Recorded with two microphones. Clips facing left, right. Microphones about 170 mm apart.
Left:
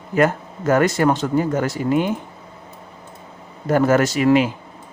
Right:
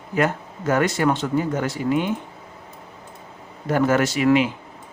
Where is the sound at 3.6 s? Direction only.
45° left (ahead or behind).